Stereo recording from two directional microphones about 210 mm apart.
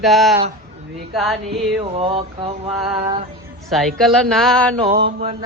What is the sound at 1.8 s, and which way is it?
Mantra, 25° right (ahead or behind).